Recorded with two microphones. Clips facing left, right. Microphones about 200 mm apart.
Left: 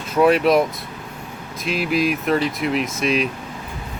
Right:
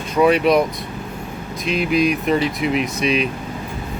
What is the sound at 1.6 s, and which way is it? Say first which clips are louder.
Speech: right 2 dB; centre (ahead or behind).